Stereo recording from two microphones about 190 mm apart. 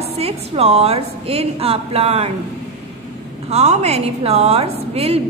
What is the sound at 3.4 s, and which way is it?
A woman's voice, 35° right (ahead or behind).